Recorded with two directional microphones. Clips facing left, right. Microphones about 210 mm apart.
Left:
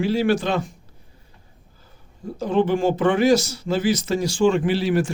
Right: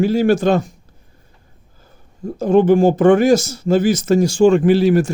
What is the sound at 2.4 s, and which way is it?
Speech, 45° right (ahead or behind).